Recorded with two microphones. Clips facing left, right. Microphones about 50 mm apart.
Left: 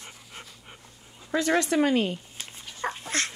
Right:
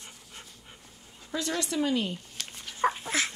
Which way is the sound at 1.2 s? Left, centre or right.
Left.